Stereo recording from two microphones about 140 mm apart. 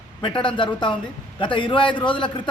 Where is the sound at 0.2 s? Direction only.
35° left (ahead or behind).